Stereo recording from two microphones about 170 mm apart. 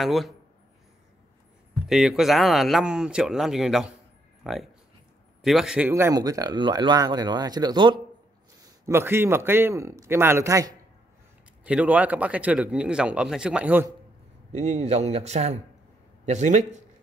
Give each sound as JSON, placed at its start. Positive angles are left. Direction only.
{"t": 0.0, "sound": "speech", "side_deg": 0}
{"t": 1.9, "sound": "a man's voice", "side_deg": 0}
{"t": 11.6, "sound": "a man's voice", "side_deg": -5}
{"t": 14.5, "sound": "a man's voice", "side_deg": -40}